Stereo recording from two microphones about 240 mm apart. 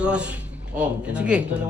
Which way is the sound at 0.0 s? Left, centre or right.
Centre.